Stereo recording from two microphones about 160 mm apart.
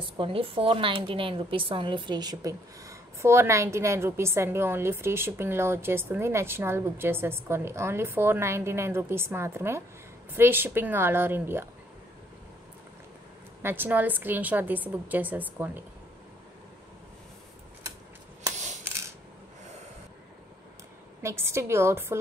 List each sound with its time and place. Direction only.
0.2 s speech: 35° right (ahead or behind); by 11.6 s 15° right (ahead or behind)
13.6 s speech: 15° right (ahead or behind)
18.9 s camera: 15° right (ahead or behind)
21.2 s speech: 15° right (ahead or behind)